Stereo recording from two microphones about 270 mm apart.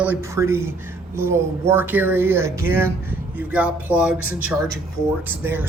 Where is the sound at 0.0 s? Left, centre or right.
Centre.